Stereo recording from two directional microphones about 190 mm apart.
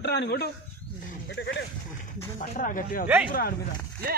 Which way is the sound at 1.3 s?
70° left (ahead or behind).